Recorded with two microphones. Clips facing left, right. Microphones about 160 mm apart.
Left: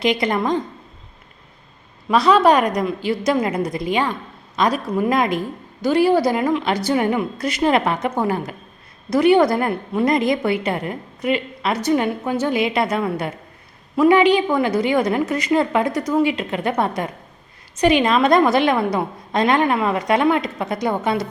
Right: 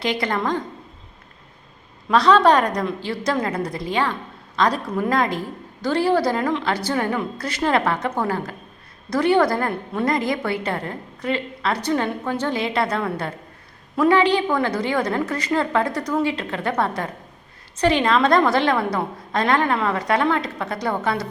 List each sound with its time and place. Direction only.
0.0 s a woman's voice: 15° left (ahead or behind)
2.0 s a woman's voice: 10° left (ahead or behind)